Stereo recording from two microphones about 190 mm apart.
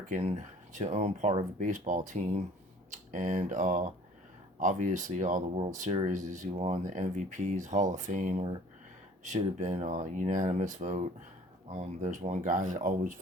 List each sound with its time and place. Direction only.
0.1 s speech: 35° right (ahead or behind)
9.6 s speech: 40° right (ahead or behind)